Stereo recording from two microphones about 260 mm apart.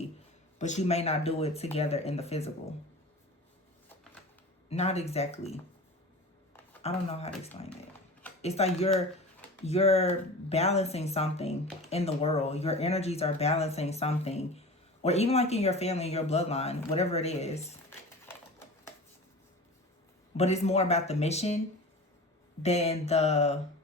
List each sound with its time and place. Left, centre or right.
0.6 s speech: left
4.7 s speech: left
6.8 s speech: left
20.3 s speech: left
22.6 s speech: left